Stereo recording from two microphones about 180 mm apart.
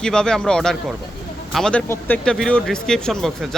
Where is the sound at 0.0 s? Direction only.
5° left (ahead or behind).